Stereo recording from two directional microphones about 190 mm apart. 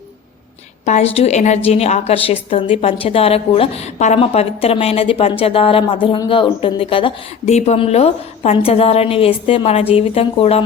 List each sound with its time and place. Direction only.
0.9 s a woman's voice: 35° left (ahead or behind)